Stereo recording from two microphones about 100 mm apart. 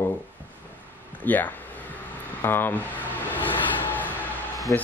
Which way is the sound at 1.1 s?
15° left (ahead or behind).